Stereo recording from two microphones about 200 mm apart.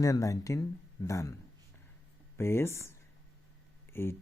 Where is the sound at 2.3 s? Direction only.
10° left (ahead or behind).